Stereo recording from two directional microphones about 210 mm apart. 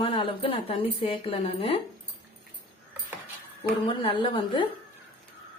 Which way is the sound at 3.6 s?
20° left (ahead or behind).